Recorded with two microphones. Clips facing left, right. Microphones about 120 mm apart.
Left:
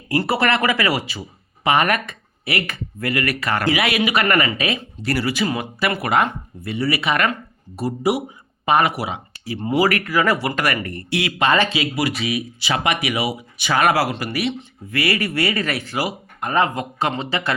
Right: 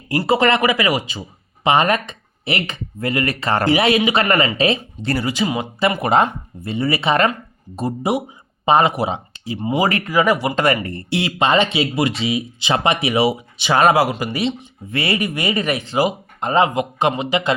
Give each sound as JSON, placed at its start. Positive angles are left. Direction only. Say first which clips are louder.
{"t": 0.2, "sound": "speech", "louder": "right 4 dB", "side_deg": -20}